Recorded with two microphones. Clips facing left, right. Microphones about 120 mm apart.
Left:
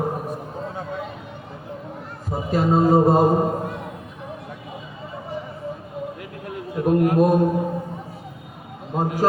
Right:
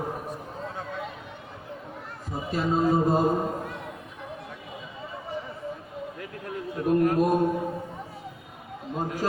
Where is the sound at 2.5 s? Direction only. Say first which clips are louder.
Left 6 dB; 55° left (ahead or behind).